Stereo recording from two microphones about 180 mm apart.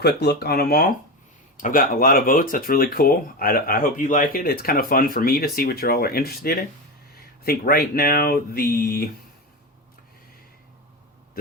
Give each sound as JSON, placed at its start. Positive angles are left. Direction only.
{"t": 0.0, "sound": "speech", "side_deg": 65}